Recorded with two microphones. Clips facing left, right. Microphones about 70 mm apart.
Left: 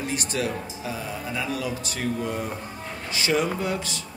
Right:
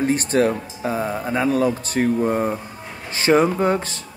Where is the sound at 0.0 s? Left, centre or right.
Right.